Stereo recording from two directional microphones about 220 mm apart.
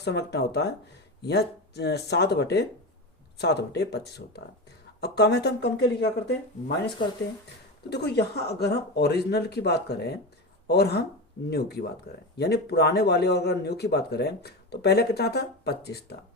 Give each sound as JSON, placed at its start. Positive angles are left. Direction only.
{"t": 0.0, "sound": "speech", "side_deg": 50}
{"t": 7.9, "sound": "speech", "side_deg": 50}